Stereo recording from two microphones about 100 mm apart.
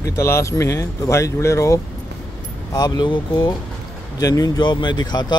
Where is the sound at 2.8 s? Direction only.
45° left (ahead or behind).